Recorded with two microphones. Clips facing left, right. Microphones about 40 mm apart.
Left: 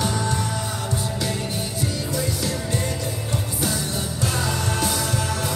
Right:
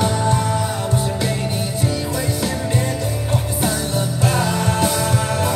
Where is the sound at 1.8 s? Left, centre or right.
Right.